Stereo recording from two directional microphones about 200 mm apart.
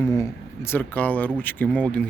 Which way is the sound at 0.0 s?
15° left (ahead or behind).